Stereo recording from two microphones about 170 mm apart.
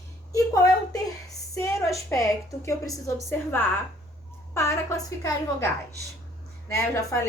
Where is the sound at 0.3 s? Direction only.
20° left (ahead or behind).